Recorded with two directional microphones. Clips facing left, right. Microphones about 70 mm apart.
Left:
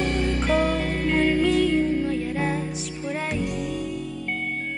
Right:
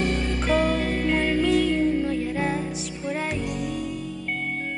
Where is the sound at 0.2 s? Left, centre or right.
Centre.